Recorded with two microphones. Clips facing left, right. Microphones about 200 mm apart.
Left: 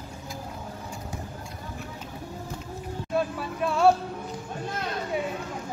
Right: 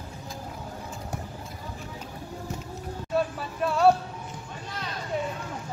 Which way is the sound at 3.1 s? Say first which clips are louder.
Even; centre (ahead or behind).